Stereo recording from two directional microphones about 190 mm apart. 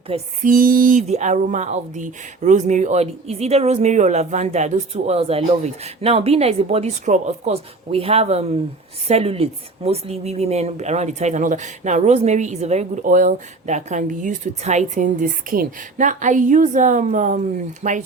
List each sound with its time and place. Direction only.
0.1 s a woman's voice: 30° right (ahead or behind)
0.4 s a woman's voice: 45° right (ahead or behind)